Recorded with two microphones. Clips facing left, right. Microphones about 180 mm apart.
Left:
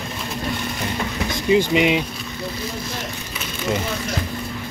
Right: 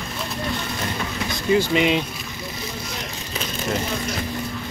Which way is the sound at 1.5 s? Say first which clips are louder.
Left 2 dB; 15° left (ahead or behind).